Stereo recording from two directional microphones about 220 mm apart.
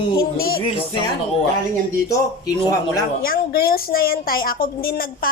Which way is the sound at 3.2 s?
40° left (ahead or behind).